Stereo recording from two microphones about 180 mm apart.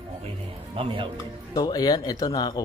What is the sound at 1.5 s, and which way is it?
Speech, 20° left (ahead or behind).